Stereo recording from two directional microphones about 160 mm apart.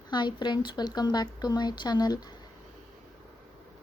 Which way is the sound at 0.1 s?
30° left (ahead or behind).